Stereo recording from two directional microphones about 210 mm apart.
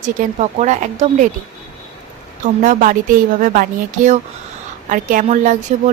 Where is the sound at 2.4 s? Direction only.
40° right (ahead or behind).